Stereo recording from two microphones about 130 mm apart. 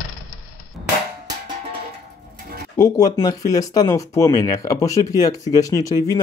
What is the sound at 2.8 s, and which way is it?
Speech, 30° left (ahead or behind).